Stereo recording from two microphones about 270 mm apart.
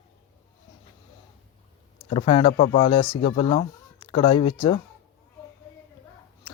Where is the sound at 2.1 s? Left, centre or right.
Centre.